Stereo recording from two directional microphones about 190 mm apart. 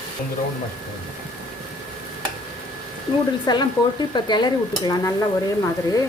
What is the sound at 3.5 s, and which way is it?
Stir, 20° left (ahead or behind).